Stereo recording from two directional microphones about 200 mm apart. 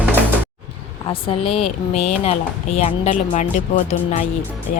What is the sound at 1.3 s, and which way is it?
Speech, 30° left (ahead or behind).